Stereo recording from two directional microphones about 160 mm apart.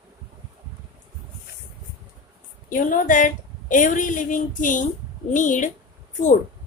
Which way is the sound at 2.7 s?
55° left (ahead or behind).